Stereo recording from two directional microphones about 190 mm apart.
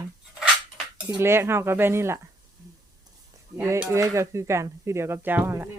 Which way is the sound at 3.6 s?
10° right (ahead or behind).